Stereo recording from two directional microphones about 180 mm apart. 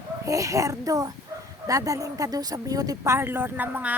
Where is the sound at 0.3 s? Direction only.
20° right (ahead or behind).